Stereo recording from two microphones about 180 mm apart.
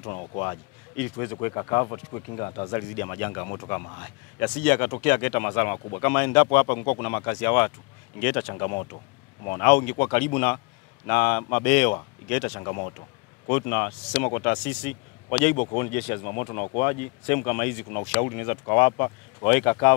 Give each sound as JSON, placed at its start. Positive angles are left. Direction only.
{"t": 0.4, "sound": "speech", "side_deg": 10}